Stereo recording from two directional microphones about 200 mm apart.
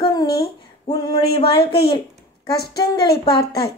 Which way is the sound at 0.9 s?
25° left (ahead or behind).